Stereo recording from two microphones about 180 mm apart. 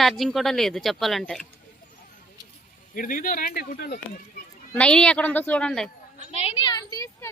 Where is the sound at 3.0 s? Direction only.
45° left (ahead or behind); by 4.0 s 65° left (ahead or behind).